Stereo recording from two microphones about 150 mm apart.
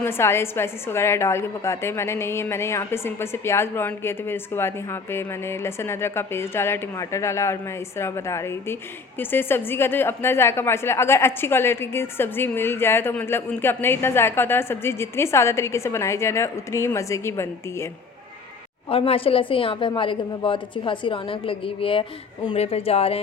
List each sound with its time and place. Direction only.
0.0 s a woman's voice: 15° left (ahead or behind)
18.9 s a woman's voice: 40° left (ahead or behind)